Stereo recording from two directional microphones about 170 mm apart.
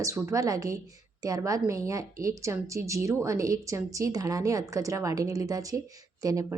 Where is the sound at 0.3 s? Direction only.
20° right (ahead or behind).